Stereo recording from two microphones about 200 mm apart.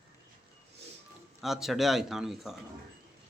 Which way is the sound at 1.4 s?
Centre (ahead or behind).